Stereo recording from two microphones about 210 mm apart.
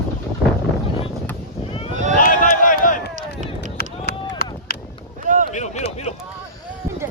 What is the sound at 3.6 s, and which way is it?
Run, 45° left (ahead or behind).